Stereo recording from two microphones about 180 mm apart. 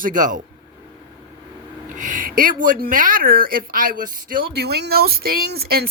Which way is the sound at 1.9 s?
45° right (ahead or behind).